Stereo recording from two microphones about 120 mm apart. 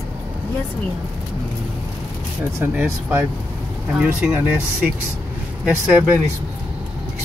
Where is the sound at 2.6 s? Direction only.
20° right (ahead or behind).